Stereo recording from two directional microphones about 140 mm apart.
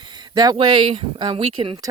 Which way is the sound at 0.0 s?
30° right (ahead or behind).